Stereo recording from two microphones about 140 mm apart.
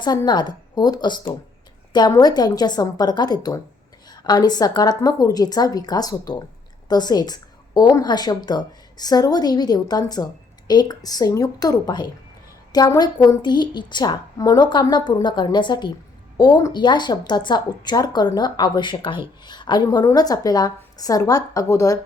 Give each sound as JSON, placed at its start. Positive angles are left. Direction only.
{"t": 0.3, "sound": "a woman's voice", "side_deg": 30}